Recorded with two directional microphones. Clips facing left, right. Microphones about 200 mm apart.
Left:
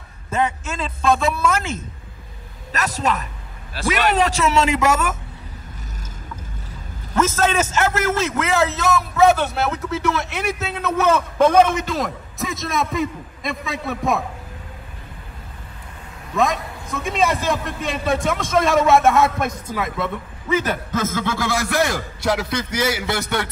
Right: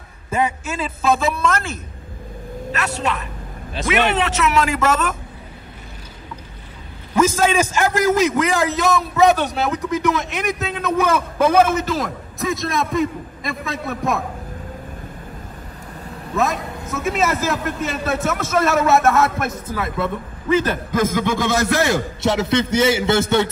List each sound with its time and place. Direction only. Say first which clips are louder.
0.3 s a man's voice: right 1 dB; 10° right (ahead or behind)
2.7 s speech: left 1 dB; 40° left (ahead or behind)
4.7 s speech: even; 10° left (ahead or behind)
7.2 s a man's voice: right 2 dB; 10° right (ahead or behind)
16.3 s a man's voice: left 1 dB; 5° right (ahead or behind)
19.4 s speech: even; 15° left (ahead or behind)
20.9 s a man's voice: right 6 dB; 15° right (ahead or behind)